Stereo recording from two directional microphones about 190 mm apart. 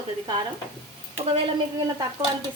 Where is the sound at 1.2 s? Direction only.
30° right (ahead or behind).